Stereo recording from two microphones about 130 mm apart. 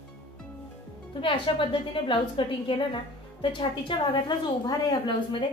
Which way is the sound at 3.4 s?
40° left (ahead or behind).